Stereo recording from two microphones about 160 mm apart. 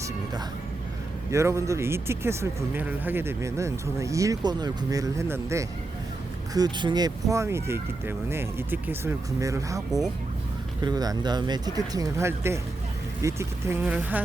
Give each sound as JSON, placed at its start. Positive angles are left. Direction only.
{"t": 1.3, "sound": "speech", "side_deg": -20}
{"t": 10.8, "sound": "speech", "side_deg": -25}